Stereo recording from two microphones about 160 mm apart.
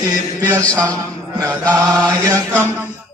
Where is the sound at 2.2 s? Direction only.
15° right (ahead or behind).